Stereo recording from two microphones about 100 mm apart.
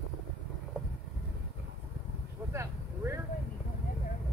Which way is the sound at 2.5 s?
25° right (ahead or behind).